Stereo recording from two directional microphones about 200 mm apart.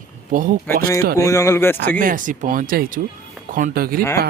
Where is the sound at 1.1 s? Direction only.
15° left (ahead or behind).